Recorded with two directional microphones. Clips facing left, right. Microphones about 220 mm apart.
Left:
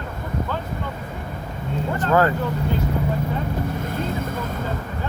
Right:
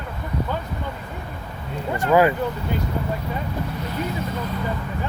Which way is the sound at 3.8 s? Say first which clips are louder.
Left 1 dB; 50° left (ahead or behind).